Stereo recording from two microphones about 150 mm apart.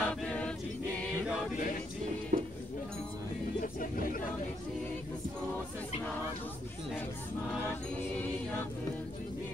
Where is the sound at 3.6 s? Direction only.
65° left (ahead or behind).